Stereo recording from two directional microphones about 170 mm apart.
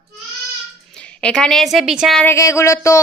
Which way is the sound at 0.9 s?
5° left (ahead or behind).